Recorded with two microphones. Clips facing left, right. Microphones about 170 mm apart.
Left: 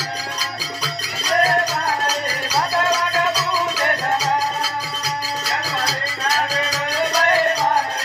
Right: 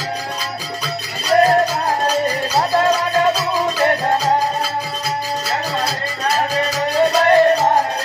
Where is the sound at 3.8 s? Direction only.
30° right (ahead or behind).